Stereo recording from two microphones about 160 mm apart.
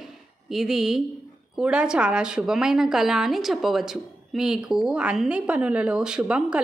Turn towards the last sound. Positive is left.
turn(degrees=-5)  # may be behind; listen again after turning